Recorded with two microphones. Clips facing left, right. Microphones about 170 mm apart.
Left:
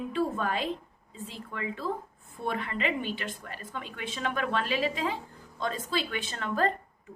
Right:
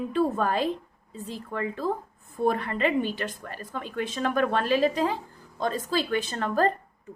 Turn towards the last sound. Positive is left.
turn(degrees=-40)  # may be behind; listen again after turning